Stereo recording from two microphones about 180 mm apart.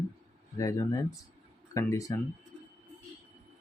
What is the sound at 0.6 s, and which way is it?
Speech, 20° left (ahead or behind).